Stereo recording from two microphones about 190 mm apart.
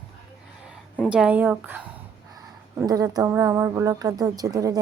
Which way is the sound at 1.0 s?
5° right (ahead or behind).